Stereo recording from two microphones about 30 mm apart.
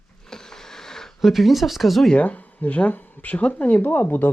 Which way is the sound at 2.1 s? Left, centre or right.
Left.